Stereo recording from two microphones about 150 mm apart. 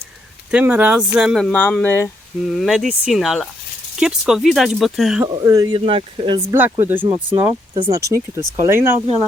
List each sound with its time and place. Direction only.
0.5 s speech: 10° right (ahead or behind); by 2.0 s 15° left (ahead or behind)
2.5 s speech: centre (ahead or behind)
5.2 s speech: 25° right (ahead or behind)
5.8 s speech: 40° right (ahead or behind)
6.5 s speech: 15° right (ahead or behind)
7.7 s speech: 35° right (ahead or behind)
7.9 s speech: 20° right (ahead or behind)